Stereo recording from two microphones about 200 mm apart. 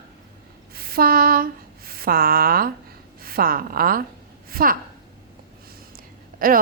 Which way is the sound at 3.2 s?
45° right (ahead or behind).